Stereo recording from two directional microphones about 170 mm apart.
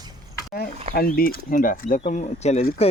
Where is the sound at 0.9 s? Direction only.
60° left (ahead or behind); by 2.6 s 40° left (ahead or behind).